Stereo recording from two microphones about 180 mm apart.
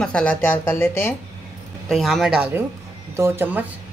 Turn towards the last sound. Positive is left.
turn(degrees=-10)  # may be behind; listen again after turning